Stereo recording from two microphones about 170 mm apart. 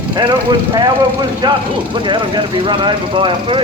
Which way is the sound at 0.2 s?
25° right (ahead or behind).